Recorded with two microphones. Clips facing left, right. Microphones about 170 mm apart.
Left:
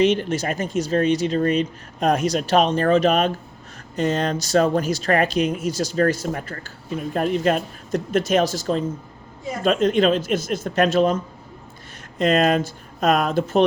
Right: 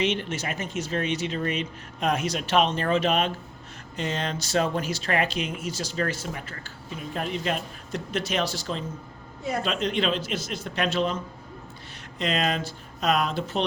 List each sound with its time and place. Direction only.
0.0 s speech: 40° left (ahead or behind)
12.2 s speech: 50° left (ahead or behind)